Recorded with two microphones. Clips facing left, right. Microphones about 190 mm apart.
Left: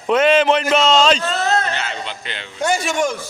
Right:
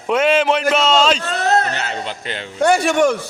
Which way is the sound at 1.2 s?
65° right (ahead or behind).